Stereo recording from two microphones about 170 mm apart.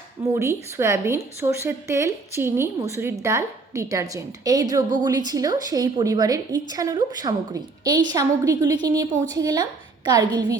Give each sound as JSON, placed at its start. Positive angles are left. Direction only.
{"t": 0.3, "sound": "a woman's voice", "side_deg": -15}